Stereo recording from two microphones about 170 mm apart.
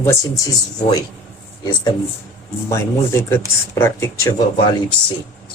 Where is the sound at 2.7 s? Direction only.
15° left (ahead or behind).